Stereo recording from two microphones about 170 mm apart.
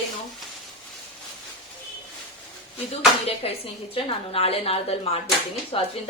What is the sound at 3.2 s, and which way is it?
A woman's voice, 35° left (ahead or behind).